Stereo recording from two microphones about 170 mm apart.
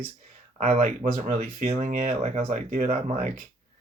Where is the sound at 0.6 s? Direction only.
40° right (ahead or behind).